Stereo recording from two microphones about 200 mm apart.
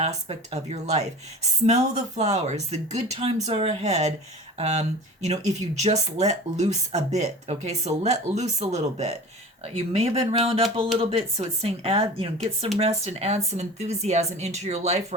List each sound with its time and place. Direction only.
0.3 s speech: 30° right (ahead or behind)